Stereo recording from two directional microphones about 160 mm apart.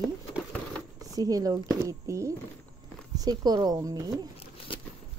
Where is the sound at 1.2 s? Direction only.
20° right (ahead or behind).